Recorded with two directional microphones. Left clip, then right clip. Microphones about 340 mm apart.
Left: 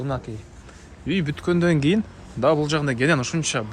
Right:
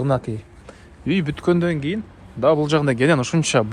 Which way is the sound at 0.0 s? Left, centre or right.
Centre.